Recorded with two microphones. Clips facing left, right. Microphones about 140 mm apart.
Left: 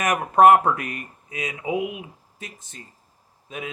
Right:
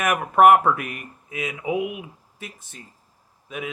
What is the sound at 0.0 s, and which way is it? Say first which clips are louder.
Speech: even; 25° left (ahead or behind).